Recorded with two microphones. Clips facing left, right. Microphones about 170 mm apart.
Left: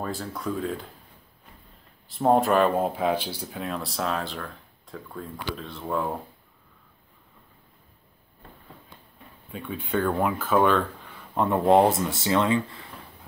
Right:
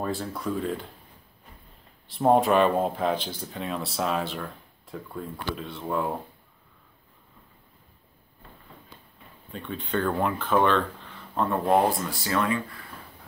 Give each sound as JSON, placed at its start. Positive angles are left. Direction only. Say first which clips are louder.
{"t": 0.0, "sound": "speech", "louder": "right 1 dB", "side_deg": 0}
{"t": 2.0, "sound": "speech", "louder": "even", "side_deg": 0}
{"t": 9.5, "sound": "speech", "louder": "left 1 dB", "side_deg": 5}
{"t": 11.3, "sound": "speech", "louder": "left 4 dB", "side_deg": 20}